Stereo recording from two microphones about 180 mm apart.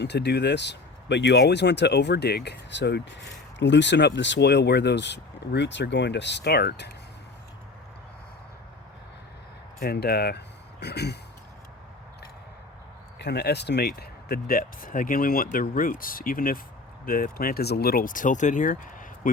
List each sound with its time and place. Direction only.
0.0 s speech: 70° left (ahead or behind)
9.8 s speech: 60° left (ahead or behind)
13.1 s speech: 70° left (ahead or behind); by 19.3 s 50° left (ahead or behind)